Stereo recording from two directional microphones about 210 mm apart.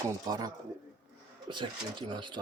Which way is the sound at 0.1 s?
20° right (ahead or behind).